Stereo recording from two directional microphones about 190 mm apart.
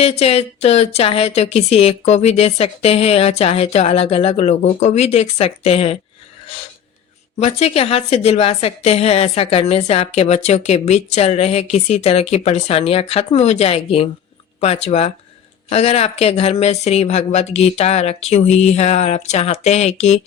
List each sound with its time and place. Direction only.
0.0 s a woman's voice: 30° left (ahead or behind)
7.3 s a woman's voice: 35° left (ahead or behind)